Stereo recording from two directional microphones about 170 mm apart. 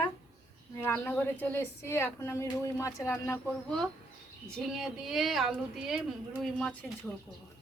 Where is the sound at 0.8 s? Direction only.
10° left (ahead or behind).